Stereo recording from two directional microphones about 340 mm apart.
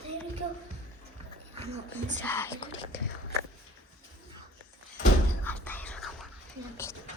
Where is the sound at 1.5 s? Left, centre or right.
Centre.